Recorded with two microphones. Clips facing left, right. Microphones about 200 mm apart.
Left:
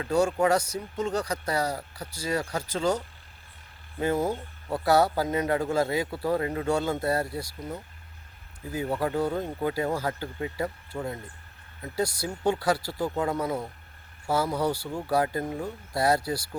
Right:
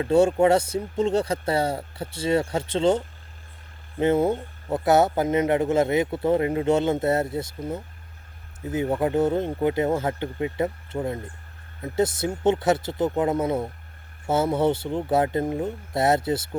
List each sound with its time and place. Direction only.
0.0 s speech: 25° right (ahead or behind)
4.0 s speech: 25° right (ahead or behind)